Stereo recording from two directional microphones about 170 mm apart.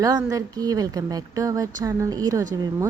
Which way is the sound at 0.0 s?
20° right (ahead or behind).